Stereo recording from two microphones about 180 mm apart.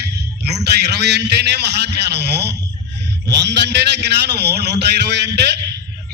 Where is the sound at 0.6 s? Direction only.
65° right (ahead or behind).